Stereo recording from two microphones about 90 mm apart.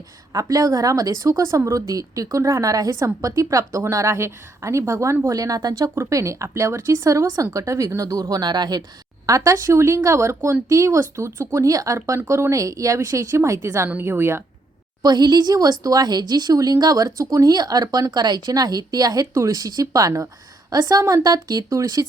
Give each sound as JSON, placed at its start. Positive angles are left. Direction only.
{"t": 0.3, "sound": "speech", "side_deg": -40}
{"t": 5.9, "sound": "speech", "side_deg": -30}
{"t": 9.2, "sound": "a woman's voice", "side_deg": -40}
{"t": 15.0, "sound": "speech", "side_deg": -50}